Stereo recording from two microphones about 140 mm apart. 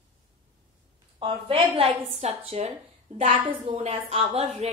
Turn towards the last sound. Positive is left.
turn(degrees=-50)  # may be behind; listen again after turning